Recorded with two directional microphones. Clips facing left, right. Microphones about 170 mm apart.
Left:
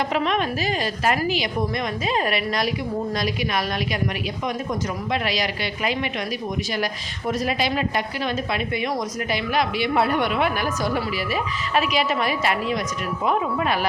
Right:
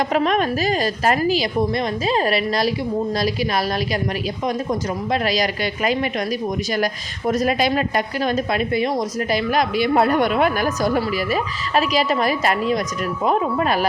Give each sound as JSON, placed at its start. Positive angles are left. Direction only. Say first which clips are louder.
{"t": 0.1, "sound": "a woman's voice", "louder": "right 4 dB", "side_deg": -45}